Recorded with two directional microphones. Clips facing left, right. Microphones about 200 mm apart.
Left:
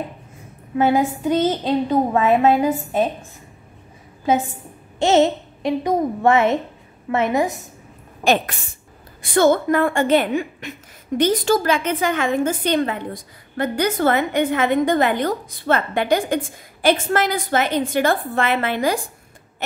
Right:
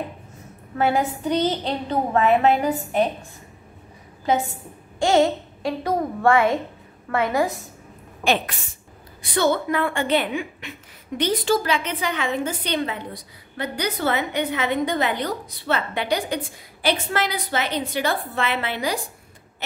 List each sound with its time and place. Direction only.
0.7 s a woman's voice: 15° left (ahead or behind)
4.9 s a child's voice: 25° left (ahead or behind)
8.2 s a woman's voice: 45° left (ahead or behind)